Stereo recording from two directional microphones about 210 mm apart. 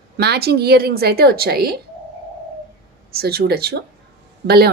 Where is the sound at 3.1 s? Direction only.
45° right (ahead or behind).